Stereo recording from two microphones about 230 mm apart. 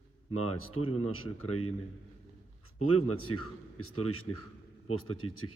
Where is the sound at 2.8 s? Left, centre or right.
Left.